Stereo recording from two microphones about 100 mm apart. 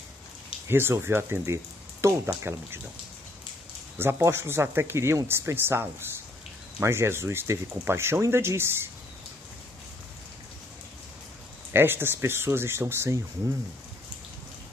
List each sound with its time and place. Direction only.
0.7 s speech: 25° right (ahead or behind)
4.0 s speech: 25° right (ahead or behind)
11.7 s speech: 20° right (ahead or behind)